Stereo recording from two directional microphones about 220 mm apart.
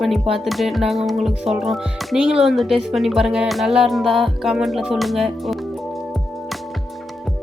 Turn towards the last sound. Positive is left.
turn(degrees=0)  # may be behind; listen again after turning